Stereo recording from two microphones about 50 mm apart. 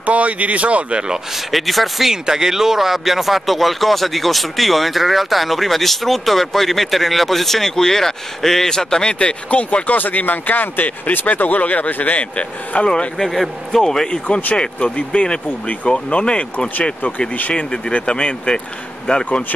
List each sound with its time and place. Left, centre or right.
0.0 s speech: right
1.5 s speech: centre
9.2 s speech: left
13.3 s a man's voice: centre
14.6 s speech: left
17.6 s a man's voice: centre